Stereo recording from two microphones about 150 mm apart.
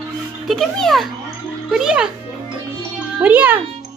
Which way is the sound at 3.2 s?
10° right (ahead or behind).